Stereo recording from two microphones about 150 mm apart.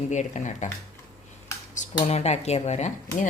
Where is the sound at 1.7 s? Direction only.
45° left (ahead or behind).